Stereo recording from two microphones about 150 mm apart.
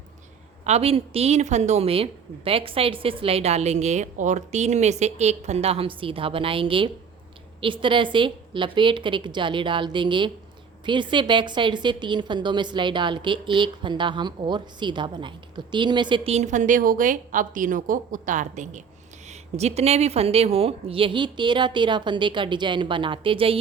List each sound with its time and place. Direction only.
0.6 s a woman's voice: 45° right (ahead or behind)